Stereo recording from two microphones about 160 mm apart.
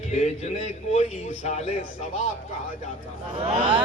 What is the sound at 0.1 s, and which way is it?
A man's voice, 45° left (ahead or behind).